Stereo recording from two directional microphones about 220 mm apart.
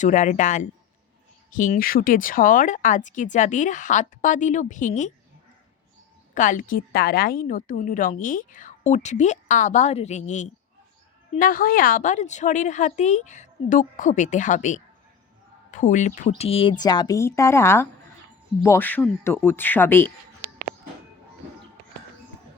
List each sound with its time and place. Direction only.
0.0 s a woman's voice: 35° left (ahead or behind)
6.3 s a woman's voice: 35° left (ahead or behind); by 20.1 s 10° left (ahead or behind)